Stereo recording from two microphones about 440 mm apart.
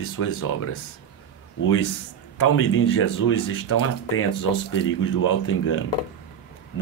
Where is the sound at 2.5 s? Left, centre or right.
Left.